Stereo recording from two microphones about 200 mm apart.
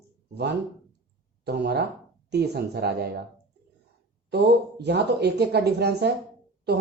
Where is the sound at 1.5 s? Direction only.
55° right (ahead or behind).